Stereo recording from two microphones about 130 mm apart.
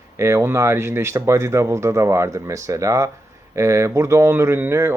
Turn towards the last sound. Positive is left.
turn(degrees=-20)  # may be behind; listen again after turning